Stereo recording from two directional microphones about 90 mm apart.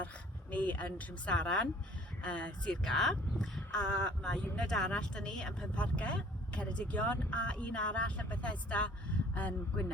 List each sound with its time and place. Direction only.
0.5 s speech: 15° left (ahead or behind)